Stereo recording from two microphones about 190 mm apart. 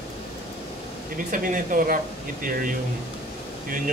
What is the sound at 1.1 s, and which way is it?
Speech, 45° right (ahead or behind).